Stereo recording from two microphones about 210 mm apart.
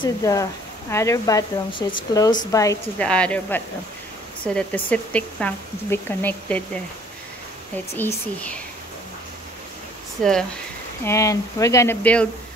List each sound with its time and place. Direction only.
0.0 s speech: 15° left (ahead or behind)
7.9 s speech: 10° left (ahead or behind)
10.2 s speech: centre (ahead or behind)
11.1 s speech: 15° left (ahead or behind)